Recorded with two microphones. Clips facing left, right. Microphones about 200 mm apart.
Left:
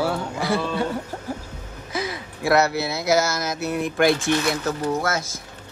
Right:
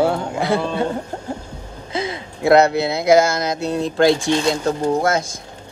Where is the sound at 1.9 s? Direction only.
25° right (ahead or behind).